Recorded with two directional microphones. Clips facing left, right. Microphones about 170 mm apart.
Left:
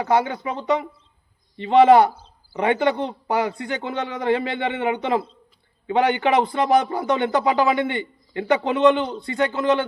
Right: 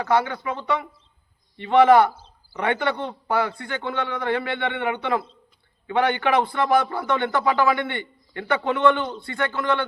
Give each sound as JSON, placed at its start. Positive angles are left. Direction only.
{"t": 0.0, "sound": "a man's voice", "side_deg": 20}